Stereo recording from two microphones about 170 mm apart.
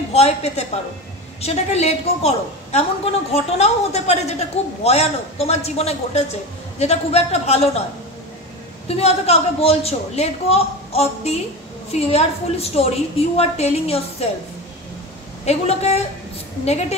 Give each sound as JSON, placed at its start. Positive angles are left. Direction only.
{"t": 0.1, "sound": "a woman's voice", "side_deg": 40}
{"t": 8.8, "sound": "a woman's voice", "side_deg": 35}
{"t": 15.4, "sound": "a woman's voice", "side_deg": 40}